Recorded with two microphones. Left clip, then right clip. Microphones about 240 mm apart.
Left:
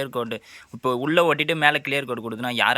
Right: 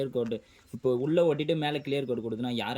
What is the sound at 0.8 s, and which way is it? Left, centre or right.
Speech, left.